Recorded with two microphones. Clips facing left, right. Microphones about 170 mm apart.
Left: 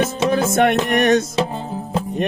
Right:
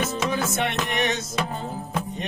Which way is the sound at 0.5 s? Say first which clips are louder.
Left 10 dB; 55° left (ahead or behind).